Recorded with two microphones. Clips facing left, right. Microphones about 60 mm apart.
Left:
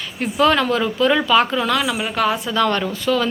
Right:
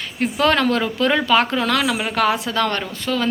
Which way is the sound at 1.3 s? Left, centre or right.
Right.